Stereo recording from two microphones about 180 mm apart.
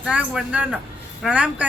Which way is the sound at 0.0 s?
5° right (ahead or behind).